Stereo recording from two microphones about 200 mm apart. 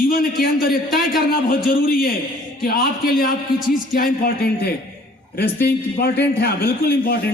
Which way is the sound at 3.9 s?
45° left (ahead or behind).